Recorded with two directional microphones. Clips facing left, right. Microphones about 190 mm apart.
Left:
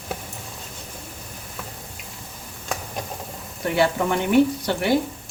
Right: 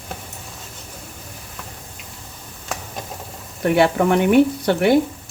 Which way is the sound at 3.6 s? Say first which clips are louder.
Right 5 dB; 60° right (ahead or behind).